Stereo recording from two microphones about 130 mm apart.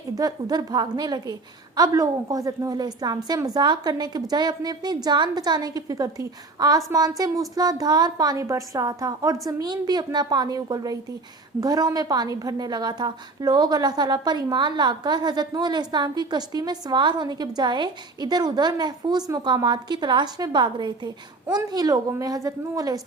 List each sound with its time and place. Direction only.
0.2 s a woman's voice: 30° right (ahead or behind)